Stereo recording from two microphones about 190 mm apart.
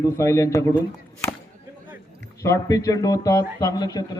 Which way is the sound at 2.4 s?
15° left (ahead or behind).